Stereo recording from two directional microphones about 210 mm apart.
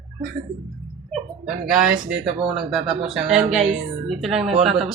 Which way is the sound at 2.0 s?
30° right (ahead or behind).